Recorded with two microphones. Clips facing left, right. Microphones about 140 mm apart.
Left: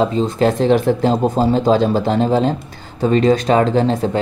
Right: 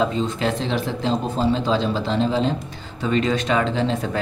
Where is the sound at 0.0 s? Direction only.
40° left (ahead or behind).